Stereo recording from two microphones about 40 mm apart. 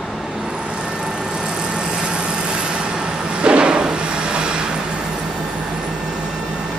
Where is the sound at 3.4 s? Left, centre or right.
Right.